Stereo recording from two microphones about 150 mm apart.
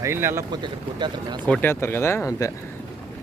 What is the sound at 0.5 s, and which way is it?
Speech, 30° right (ahead or behind).